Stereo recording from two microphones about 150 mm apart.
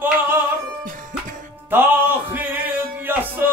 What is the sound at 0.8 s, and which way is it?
Music, 65° right (ahead or behind).